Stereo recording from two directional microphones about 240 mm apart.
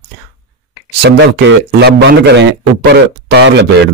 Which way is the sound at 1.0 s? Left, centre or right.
Right.